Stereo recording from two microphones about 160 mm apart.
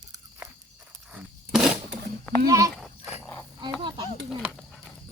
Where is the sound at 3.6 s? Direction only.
30° right (ahead or behind).